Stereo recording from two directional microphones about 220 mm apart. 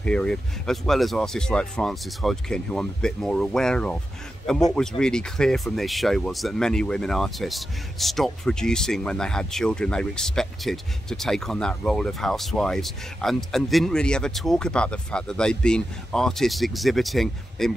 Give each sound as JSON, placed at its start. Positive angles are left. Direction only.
{"t": 0.0, "sound": "speech", "side_deg": 5}